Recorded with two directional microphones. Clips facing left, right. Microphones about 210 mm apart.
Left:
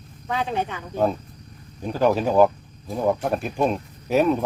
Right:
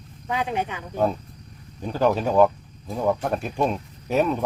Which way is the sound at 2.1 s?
5° left (ahead or behind).